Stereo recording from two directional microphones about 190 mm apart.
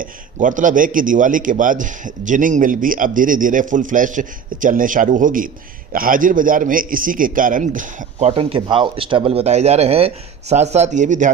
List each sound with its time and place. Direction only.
0.0 s a man's voice: 45° right (ahead or behind)
8.3 s speech: 30° right (ahead or behind)